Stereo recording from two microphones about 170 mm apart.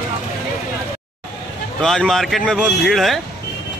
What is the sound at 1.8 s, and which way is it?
Speech, 5° left (ahead or behind).